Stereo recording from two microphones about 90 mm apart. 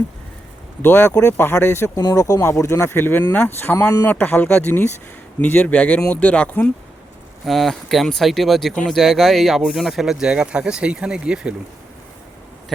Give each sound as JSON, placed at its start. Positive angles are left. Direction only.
{"t": 0.8, "sound": "speech", "side_deg": 25}
{"t": 2.0, "sound": "speech", "side_deg": 45}
{"t": 2.4, "sound": "speech", "side_deg": 30}
{"t": 7.4, "sound": "speech", "side_deg": 0}